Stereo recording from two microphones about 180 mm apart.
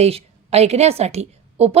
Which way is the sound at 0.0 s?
35° right (ahead or behind).